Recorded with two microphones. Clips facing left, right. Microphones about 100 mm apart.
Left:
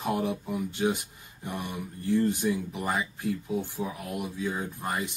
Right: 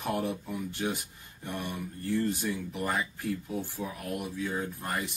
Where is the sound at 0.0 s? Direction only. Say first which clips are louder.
Left 3 dB; 15° left (ahead or behind).